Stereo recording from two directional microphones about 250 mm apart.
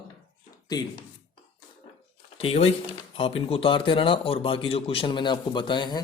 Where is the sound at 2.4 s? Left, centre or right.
Left.